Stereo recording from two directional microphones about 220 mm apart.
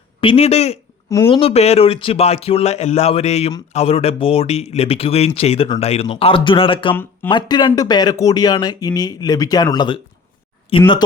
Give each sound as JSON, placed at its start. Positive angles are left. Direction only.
{"t": 0.2, "sound": "speech", "side_deg": 25}